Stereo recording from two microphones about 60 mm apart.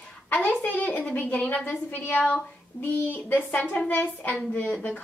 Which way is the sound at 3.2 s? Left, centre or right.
Left.